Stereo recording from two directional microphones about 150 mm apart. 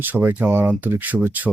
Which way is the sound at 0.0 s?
10° right (ahead or behind).